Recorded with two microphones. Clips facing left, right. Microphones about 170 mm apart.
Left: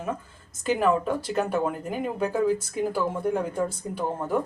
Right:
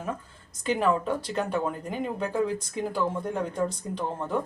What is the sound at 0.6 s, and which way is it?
Speech, 5° left (ahead or behind).